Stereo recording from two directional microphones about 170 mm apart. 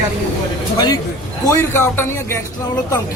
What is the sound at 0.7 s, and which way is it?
A man's voice, 20° left (ahead or behind).